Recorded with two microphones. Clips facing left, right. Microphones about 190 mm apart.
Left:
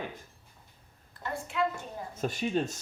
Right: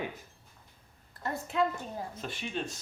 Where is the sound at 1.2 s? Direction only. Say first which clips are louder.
Right 2 dB; 40° right (ahead or behind).